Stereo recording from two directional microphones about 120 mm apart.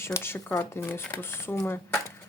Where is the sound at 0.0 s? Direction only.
20° left (ahead or behind).